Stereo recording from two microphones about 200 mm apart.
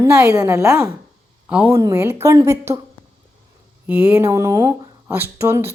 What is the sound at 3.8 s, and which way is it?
Speech, 10° right (ahead or behind).